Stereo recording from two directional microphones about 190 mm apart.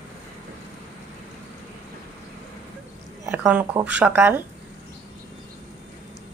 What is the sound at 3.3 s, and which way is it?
Speech, 5° right (ahead or behind).